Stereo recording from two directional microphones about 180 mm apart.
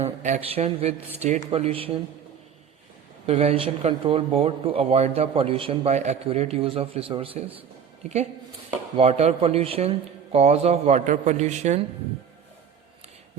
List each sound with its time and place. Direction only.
0.0 s speech: 40° right (ahead or behind)
3.2 s speech: 35° right (ahead or behind)
9.0 s speech: 35° right (ahead or behind)